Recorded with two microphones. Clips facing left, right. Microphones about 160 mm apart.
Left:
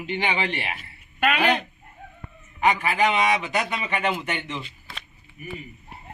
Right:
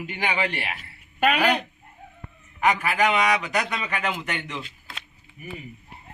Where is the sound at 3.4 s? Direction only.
25° left (ahead or behind).